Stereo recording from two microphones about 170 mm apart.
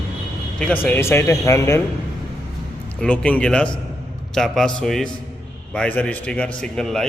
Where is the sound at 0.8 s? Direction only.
10° left (ahead or behind).